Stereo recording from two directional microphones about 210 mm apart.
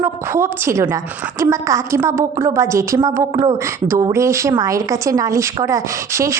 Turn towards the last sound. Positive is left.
turn(degrees=-15)  # may be behind; listen again after turning